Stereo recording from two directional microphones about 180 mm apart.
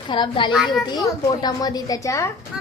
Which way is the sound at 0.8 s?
20° left (ahead or behind).